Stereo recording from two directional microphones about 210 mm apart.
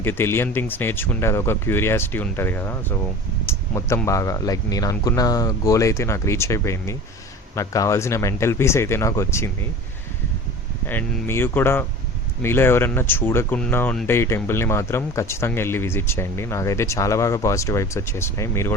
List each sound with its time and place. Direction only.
0.0 s speech: 10° left (ahead or behind)
10.8 s speech: 10° left (ahead or behind)